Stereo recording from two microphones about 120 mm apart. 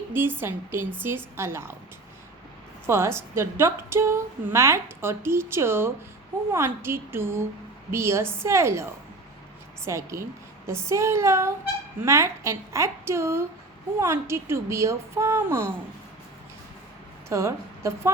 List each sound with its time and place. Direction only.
0.1 s a woman's voice: 20° right (ahead or behind)
2.8 s a woman's voice: 20° right (ahead or behind)
17.2 s a woman's voice: 25° right (ahead or behind)